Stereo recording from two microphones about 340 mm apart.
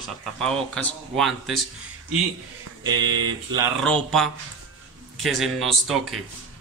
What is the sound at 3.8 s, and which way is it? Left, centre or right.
Speech, centre.